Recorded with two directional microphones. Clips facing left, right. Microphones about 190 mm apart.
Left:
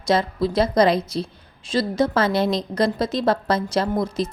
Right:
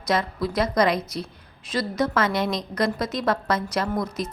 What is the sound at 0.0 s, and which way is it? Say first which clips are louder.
A woman's voice: left 4 dB; 30° left (ahead or behind).